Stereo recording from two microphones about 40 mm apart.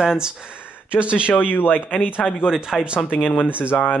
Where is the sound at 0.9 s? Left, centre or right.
Right.